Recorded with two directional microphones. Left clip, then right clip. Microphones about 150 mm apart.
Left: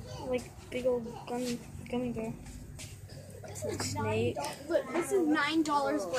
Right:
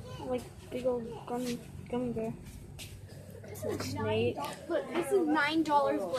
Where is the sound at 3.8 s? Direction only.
5° left (ahead or behind).